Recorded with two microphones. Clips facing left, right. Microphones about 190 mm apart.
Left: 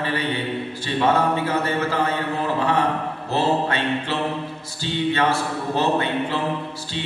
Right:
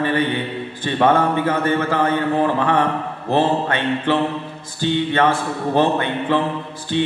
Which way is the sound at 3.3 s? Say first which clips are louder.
Right 3 dB; 55° right (ahead or behind).